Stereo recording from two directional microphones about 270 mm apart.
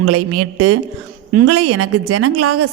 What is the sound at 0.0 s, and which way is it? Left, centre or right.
A woman's voice, right.